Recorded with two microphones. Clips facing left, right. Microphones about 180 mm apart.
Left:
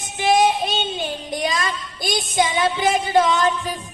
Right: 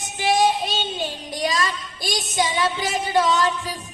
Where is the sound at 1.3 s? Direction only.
50° left (ahead or behind).